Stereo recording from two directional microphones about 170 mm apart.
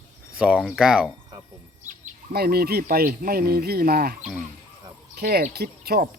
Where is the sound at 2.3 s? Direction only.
65° right (ahead or behind).